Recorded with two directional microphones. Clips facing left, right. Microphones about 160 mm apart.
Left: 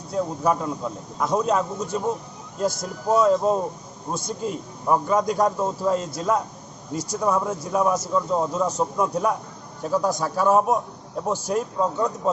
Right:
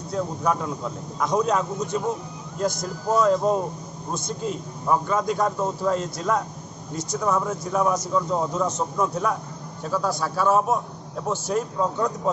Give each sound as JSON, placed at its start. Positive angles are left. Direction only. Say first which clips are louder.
{"t": 0.1, "sound": "a man's voice", "louder": "left 2 dB", "side_deg": 5}